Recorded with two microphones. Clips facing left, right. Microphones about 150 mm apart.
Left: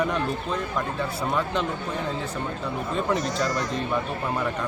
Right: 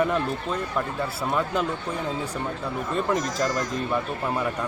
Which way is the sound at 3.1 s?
90° right.